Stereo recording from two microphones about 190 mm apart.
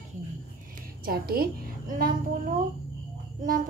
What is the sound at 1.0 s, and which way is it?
Speech, 50° right (ahead or behind).